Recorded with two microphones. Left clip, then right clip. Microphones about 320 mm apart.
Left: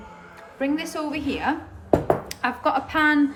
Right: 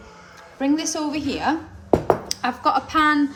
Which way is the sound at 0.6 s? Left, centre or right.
Centre.